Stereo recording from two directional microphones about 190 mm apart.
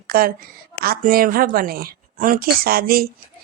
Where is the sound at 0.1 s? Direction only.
50° right (ahead or behind).